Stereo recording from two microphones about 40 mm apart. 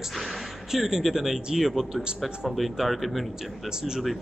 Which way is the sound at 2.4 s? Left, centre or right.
Centre.